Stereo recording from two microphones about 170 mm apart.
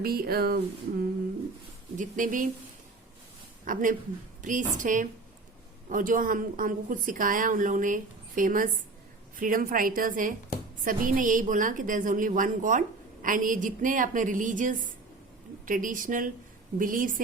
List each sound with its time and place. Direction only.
0.0 s speech: 60° right (ahead or behind)
2.0 s a woman's voice: 50° right (ahead or behind)
3.7 s a woman's voice: 50° right (ahead or behind)